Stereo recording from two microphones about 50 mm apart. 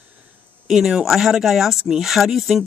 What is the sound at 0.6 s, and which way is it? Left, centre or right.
Speech, centre.